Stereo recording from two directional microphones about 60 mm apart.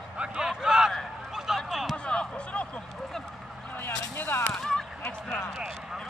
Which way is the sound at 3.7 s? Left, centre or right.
Left.